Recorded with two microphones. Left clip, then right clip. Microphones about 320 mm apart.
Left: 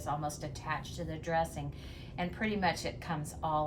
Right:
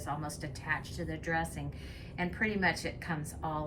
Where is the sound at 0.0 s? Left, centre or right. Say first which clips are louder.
Left 2 dB; centre.